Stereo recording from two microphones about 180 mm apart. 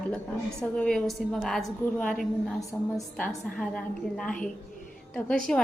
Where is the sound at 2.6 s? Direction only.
20° left (ahead or behind).